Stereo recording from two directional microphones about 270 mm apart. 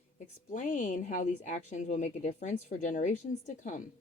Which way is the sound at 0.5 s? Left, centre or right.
Left.